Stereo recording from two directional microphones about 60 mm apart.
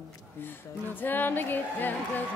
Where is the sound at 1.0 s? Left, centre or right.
Left.